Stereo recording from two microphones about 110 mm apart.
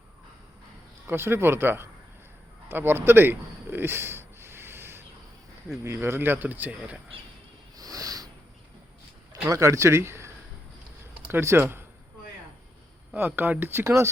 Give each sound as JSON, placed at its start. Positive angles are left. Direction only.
{"t": 1.0, "sound": "speech", "side_deg": -20}
{"t": 2.6, "sound": "a sound", "side_deg": -20}
{"t": 5.8, "sound": "speech", "side_deg": -25}
{"t": 7.8, "sound": "a sound", "side_deg": -35}
{"t": 9.3, "sound": "speech", "side_deg": -30}
{"t": 13.1, "sound": "speech", "side_deg": -20}